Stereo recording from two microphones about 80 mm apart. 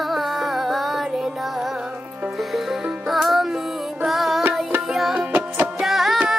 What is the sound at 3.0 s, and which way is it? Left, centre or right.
Music, centre.